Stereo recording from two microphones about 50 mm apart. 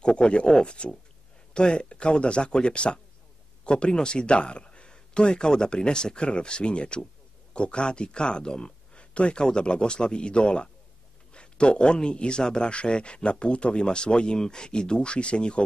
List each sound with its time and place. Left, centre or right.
0.0 s a man's voice: centre